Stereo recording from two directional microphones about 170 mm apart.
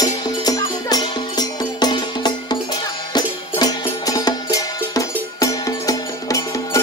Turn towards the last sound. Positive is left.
turn(degrees=20)  # may be behind; listen again after turning